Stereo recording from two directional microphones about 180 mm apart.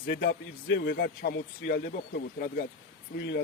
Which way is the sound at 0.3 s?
55° left (ahead or behind).